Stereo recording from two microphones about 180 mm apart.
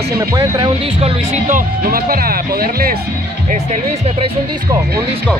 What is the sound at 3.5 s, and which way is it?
Speech, 40° right (ahead or behind).